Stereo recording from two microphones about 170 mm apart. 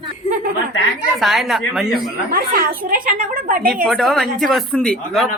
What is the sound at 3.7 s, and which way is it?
Speech, centre (ahead or behind).